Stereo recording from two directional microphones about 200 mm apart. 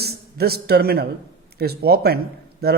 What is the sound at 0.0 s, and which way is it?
A man's voice, 50° right (ahead or behind).